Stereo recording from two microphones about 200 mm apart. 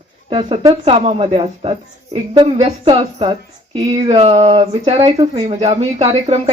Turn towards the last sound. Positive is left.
turn(degrees=-30)  # may be behind; listen again after turning